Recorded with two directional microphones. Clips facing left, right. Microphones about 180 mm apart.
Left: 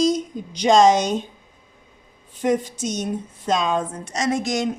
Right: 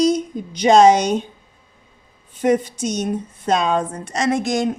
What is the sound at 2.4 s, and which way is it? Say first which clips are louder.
Speech: right 3 dB; 60° right (ahead or behind).